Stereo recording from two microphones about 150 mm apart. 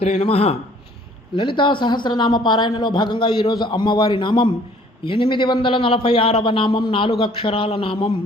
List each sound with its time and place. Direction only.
0.0 s a woman's voice: 45° left (ahead or behind)